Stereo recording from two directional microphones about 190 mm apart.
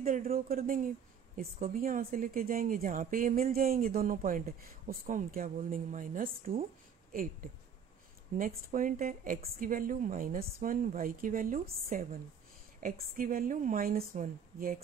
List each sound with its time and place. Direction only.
0.0 s speech: 50° right (ahead or behind)
8.4 s speech: 45° right (ahead or behind)